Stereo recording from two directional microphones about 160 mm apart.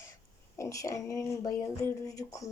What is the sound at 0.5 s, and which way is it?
A woman's voice, 20° left (ahead or behind).